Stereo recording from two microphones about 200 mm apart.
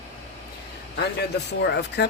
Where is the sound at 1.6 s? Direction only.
55° left (ahead or behind).